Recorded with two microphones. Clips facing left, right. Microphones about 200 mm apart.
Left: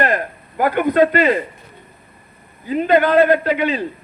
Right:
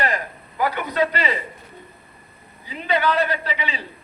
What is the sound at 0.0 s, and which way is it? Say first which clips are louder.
Speech: left 6 dB; 55° left (ahead or behind).